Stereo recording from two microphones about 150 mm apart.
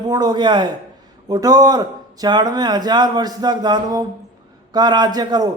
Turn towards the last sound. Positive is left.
turn(degrees=-25)  # may be behind; listen again after turning